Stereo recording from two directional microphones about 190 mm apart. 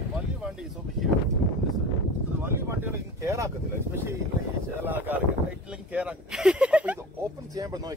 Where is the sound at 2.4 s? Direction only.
15° right (ahead or behind).